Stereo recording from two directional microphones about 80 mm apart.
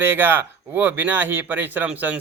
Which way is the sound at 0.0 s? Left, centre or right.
Right.